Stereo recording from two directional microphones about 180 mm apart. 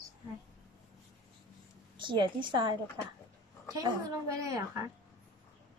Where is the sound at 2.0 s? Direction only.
25° right (ahead or behind).